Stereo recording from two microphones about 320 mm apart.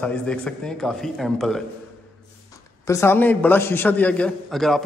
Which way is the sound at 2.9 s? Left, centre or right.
Centre.